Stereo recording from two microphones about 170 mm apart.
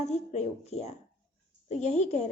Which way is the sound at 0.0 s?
40° left (ahead or behind).